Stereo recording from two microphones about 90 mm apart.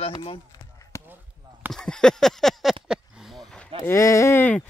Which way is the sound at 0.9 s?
35° left (ahead or behind).